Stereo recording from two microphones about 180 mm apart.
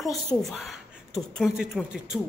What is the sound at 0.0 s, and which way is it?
Speech, centre (ahead or behind).